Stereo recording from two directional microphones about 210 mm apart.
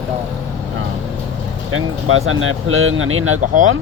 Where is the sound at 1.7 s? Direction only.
80° right.